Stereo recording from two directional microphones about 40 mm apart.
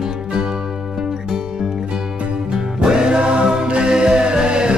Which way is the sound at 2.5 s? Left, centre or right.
Centre.